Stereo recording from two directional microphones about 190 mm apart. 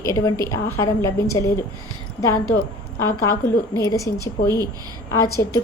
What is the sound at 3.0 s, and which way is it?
A woman's voice, 15° left (ahead or behind).